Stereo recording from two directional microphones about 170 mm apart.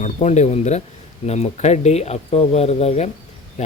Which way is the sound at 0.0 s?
40° left (ahead or behind).